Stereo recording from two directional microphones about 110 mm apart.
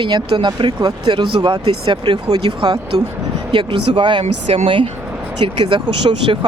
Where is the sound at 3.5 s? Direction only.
50° right (ahead or behind).